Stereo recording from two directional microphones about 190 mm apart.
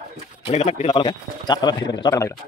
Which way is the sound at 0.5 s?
35° left (ahead or behind).